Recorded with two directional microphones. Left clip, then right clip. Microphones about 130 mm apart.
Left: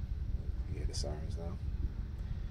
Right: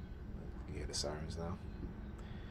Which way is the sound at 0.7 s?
25° left (ahead or behind).